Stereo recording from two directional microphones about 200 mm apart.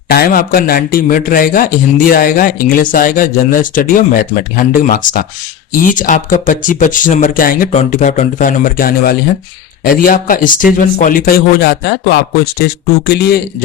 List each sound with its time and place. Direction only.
0.1 s a man's voice: 45° left (ahead or behind)